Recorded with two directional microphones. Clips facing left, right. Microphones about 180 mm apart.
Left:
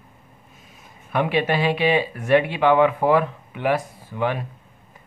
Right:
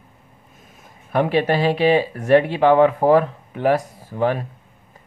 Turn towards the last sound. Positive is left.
turn(degrees=-40)  # may be behind; listen again after turning